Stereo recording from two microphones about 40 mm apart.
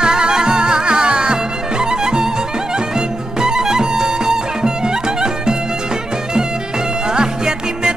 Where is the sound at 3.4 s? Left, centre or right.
Centre.